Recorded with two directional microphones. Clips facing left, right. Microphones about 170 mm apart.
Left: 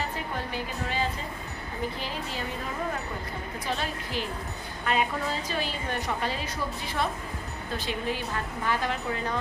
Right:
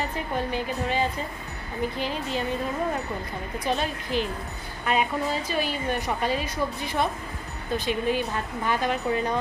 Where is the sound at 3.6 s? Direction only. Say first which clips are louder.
Right 5 dB; 20° right (ahead or behind).